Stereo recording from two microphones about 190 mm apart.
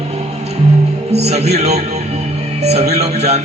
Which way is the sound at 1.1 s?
35° right (ahead or behind).